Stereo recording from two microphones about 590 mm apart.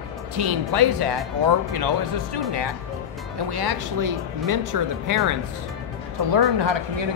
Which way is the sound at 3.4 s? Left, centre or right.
Right.